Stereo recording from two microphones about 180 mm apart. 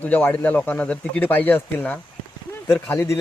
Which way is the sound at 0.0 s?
10° left (ahead or behind).